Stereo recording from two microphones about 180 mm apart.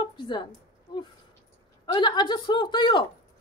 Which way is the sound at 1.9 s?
25° left (ahead or behind).